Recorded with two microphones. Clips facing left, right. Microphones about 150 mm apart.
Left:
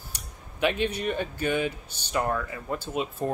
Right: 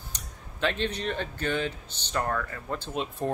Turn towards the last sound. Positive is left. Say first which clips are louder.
# left 1 dB
turn(degrees=5)  # may be behind; listen again after turning